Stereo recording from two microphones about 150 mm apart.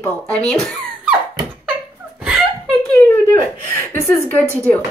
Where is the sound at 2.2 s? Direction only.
10° right (ahead or behind).